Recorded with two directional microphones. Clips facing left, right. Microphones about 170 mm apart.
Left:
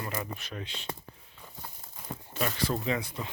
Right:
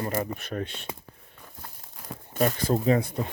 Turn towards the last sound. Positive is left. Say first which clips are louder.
# right 8 dB
turn(degrees=-50)  # may be behind; listen again after turning